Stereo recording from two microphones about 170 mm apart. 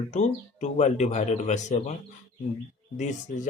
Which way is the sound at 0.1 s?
45° left (ahead or behind).